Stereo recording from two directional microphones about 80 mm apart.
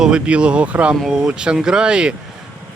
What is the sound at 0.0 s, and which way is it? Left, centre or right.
Speech, centre.